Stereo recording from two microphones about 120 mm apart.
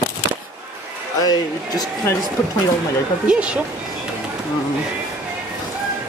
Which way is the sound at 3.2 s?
10° right (ahead or behind).